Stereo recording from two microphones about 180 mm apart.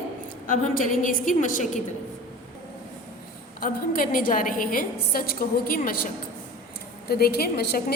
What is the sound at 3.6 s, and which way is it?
A woman's voice, 50° left (ahead or behind).